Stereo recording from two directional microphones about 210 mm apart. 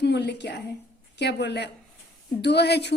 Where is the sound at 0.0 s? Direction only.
55° left (ahead or behind).